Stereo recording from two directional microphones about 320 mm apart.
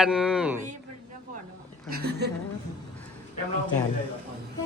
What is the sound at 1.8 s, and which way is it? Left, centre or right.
Chuckle, right.